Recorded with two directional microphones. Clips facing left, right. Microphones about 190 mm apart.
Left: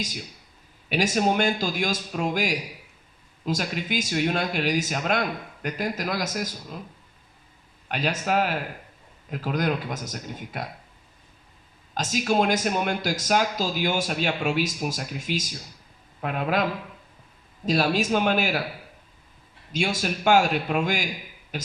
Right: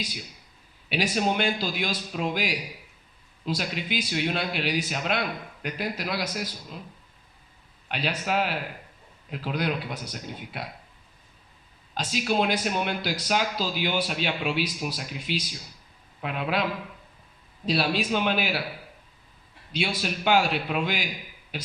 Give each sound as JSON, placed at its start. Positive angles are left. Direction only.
{"t": 0.9, "sound": "speech", "side_deg": 45}
{"t": 7.9, "sound": "speech", "side_deg": 45}
{"t": 11.9, "sound": "speech", "side_deg": 45}
{"t": 17.7, "sound": "speech", "side_deg": 45}
{"t": 19.7, "sound": "speech", "side_deg": 45}